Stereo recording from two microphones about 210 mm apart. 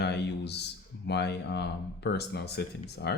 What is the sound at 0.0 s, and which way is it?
Speech, 55° left (ahead or behind).